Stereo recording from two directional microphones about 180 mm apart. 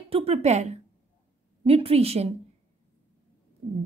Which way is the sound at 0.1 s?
35° right (ahead or behind).